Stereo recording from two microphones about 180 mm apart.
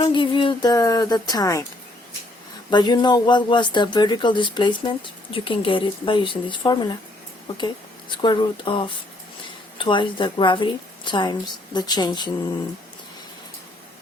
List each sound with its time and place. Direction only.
0.1 s speech: 25° left (ahead or behind)
2.6 s speech: 25° left (ahead or behind)
8.2 s speech: 25° left (ahead or behind)